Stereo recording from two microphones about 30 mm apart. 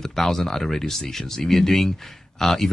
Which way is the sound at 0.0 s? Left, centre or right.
Centre.